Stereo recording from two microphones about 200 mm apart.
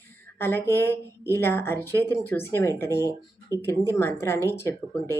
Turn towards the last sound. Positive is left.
turn(degrees=15)  # may be behind; listen again after turning